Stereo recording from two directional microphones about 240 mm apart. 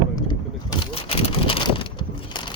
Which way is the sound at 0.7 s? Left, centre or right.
Left.